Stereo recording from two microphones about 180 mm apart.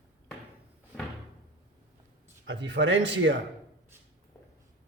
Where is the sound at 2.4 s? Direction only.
90° right.